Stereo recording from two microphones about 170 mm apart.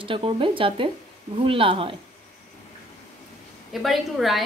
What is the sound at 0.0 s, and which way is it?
Speech, 30° right (ahead or behind).